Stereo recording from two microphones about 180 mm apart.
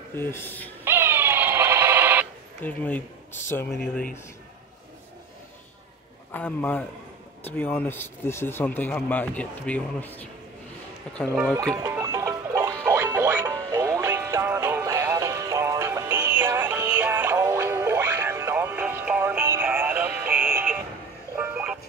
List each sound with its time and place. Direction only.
0.1 s speech: 10° left (ahead or behind)
0.8 s owl: 15° right (ahead or behind)
2.6 s speech: 10° left (ahead or behind)
6.3 s speech: 10° left (ahead or behind)
11.7 s music: 15° right (ahead or behind)